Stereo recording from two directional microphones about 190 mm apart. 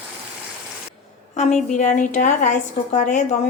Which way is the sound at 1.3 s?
40° left (ahead or behind).